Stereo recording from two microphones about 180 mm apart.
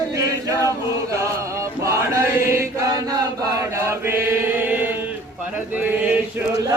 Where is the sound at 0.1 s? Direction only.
20° right (ahead or behind).